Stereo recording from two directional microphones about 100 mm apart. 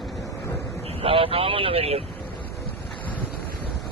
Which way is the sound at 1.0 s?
70° right (ahead or behind).